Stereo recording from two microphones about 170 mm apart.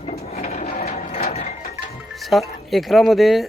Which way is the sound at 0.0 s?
40° left (ahead or behind).